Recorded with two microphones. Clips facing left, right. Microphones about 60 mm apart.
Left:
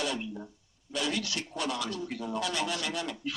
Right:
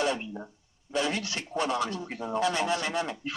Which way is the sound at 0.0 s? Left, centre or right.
Right.